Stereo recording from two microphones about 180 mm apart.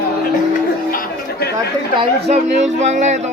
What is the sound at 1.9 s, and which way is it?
Speech, 30° right (ahead or behind).